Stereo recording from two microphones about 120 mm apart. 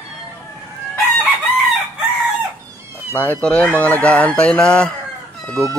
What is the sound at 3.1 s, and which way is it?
Speech, 15° left (ahead or behind).